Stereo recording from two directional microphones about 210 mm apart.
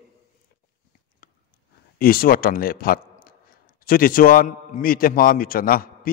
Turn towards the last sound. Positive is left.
turn(degrees=45)  # may be behind; listen again after turning